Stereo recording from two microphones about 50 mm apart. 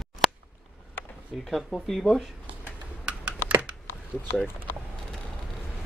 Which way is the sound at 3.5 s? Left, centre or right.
Right.